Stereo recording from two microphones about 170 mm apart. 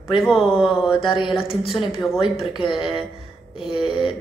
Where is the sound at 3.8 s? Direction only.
Centre (ahead or behind).